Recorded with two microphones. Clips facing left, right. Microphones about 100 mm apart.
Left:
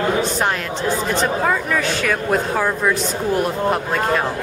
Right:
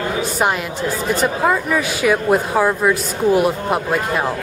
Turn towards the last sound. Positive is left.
turn(degrees=-5)  # may be behind; listen again after turning